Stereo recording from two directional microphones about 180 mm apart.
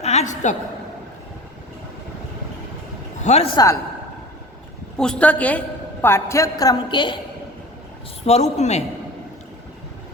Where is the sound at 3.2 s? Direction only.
40° left (ahead or behind).